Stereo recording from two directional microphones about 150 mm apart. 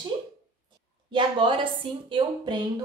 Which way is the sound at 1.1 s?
35° right (ahead or behind).